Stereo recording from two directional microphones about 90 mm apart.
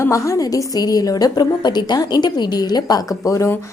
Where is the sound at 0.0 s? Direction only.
35° left (ahead or behind).